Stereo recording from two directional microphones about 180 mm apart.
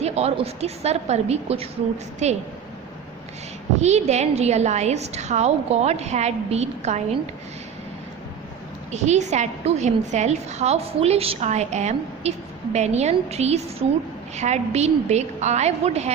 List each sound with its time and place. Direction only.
0.0 s a woman's voice: 35° right (ahead or behind)
3.8 s a woman's voice: 40° right (ahead or behind)
8.9 s a woman's voice: 40° right (ahead or behind)